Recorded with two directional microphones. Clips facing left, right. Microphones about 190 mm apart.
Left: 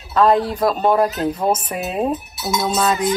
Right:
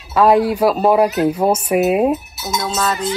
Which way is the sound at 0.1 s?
10° right (ahead or behind).